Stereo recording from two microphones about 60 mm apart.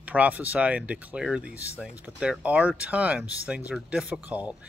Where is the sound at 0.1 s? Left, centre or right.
Right.